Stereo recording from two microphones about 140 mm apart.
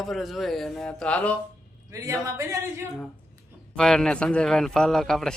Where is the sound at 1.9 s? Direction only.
25° right (ahead or behind).